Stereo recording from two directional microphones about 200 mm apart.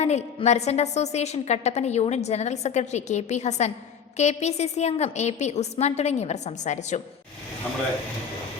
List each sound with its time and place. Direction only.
0.0 s a woman's voice: 35° left (ahead or behind)